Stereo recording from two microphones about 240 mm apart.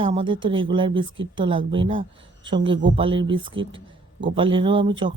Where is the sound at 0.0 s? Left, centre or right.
Right.